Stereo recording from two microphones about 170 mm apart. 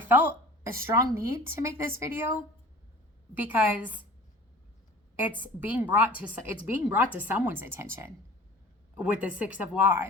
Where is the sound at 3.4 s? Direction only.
10° right (ahead or behind).